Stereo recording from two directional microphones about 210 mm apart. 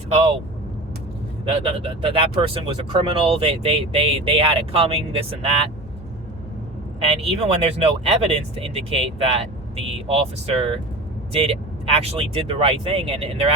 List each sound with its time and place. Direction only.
1.5 s speech: 25° right (ahead or behind)
7.3 s speech: 30° right (ahead or behind)